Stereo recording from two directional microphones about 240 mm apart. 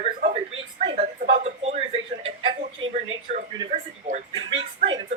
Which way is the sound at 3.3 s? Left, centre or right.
Right.